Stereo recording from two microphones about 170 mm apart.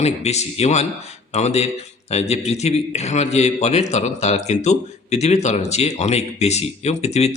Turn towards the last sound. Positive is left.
turn(degrees=40)  # may be behind; listen again after turning